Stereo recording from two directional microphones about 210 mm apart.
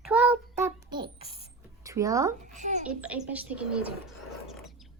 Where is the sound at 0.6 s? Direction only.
20° right (ahead or behind).